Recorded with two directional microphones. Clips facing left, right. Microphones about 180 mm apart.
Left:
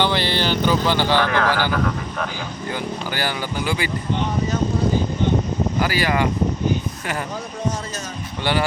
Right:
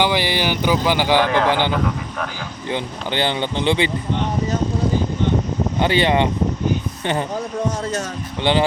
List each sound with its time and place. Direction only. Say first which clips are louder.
0.0 s speech: right 1 dB; 15° right (ahead or behind)
5.8 s speech: right 5 dB; 25° right (ahead or behind)